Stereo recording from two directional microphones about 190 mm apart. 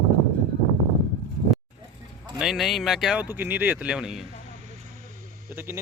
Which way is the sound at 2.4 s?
Centre (ahead or behind).